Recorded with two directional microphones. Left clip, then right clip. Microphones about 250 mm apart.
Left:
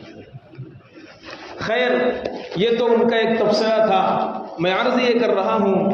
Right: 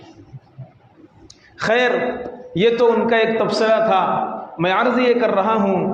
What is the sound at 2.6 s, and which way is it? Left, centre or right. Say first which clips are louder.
A man's voice: right 2 dB; right.